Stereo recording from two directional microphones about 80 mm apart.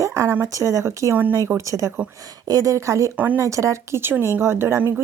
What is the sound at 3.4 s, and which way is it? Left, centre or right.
A woman's voice, right.